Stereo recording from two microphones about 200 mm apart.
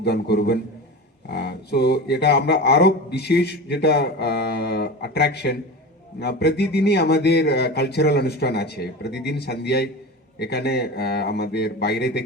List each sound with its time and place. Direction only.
0.0 s speech: 55° left (ahead or behind)